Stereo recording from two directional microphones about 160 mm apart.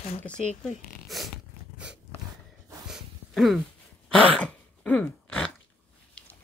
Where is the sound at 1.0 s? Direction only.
Centre (ahead or behind).